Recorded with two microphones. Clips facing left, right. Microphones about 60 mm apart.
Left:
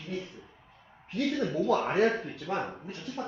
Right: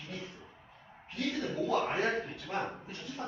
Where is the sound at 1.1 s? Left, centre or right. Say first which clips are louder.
Left 5 dB; left.